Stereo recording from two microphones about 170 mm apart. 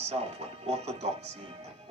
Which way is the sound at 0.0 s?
40° right (ahead or behind).